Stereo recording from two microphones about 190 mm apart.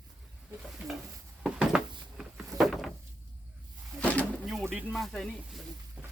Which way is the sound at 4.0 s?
5° left (ahead or behind).